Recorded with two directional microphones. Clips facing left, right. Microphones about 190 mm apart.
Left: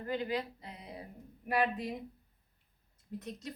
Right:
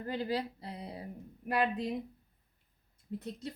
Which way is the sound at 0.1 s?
35° right (ahead or behind).